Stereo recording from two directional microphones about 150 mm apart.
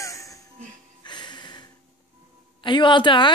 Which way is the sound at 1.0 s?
30° left (ahead or behind).